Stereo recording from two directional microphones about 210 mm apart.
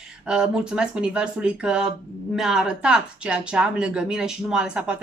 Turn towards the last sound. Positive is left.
turn(degrees=-5)  # may be behind; listen again after turning